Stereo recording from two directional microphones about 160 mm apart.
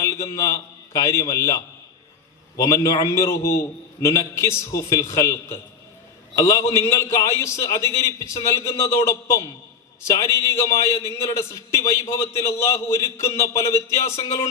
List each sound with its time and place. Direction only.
0.0 s a man's voice: 20° left (ahead or behind)